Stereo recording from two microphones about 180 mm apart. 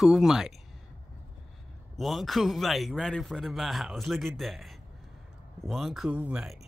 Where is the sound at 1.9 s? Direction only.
Centre (ahead or behind).